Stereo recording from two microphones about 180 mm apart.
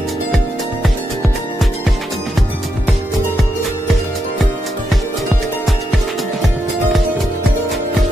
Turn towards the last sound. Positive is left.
turn(degrees=0)  # may be behind; listen again after turning